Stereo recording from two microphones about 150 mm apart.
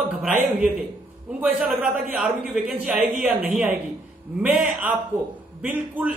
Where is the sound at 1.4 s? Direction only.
5° right (ahead or behind).